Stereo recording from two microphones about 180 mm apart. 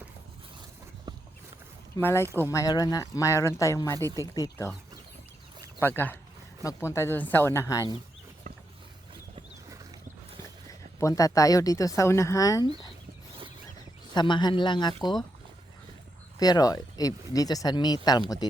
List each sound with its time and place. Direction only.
2.0 s speech: 10° left (ahead or behind)
5.8 s speech: 10° left (ahead or behind)
11.0 s speech: 20° left (ahead or behind)
14.1 s speech: 25° left (ahead or behind)
16.4 s speech: 20° left (ahead or behind)